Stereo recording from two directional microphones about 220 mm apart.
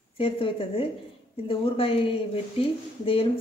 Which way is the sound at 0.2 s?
25° left (ahead or behind).